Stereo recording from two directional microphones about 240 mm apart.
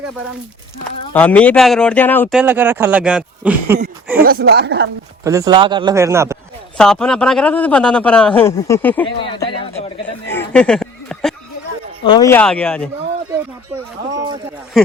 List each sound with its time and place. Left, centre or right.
1.1 s a man's voice: centre
2.4 s speech: centre
4.2 s speech: right
5.2 s speech: centre
6.7 s a man's voice: centre
9.0 s speech: left
10.2 s speech: centre
12.0 s a man's voice: centre